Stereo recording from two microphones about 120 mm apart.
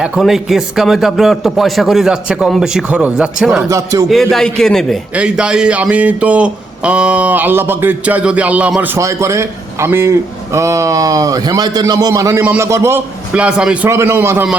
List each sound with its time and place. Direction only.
0.0 s speech: centre (ahead or behind)
3.7 s speech: 30° right (ahead or behind)
4.1 s speech: centre (ahead or behind)
5.1 s a sound: 10° right (ahead or behind)
9.0 s speech: 25° right (ahead or behind)
12.4 s a sound: 15° right (ahead or behind)
12.6 s speech: 25° right (ahead or behind)
13.3 s a sound: 10° right (ahead or behind)
13.9 s speech: 20° right (ahead or behind)